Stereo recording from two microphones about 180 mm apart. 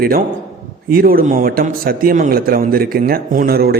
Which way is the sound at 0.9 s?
55° right (ahead or behind).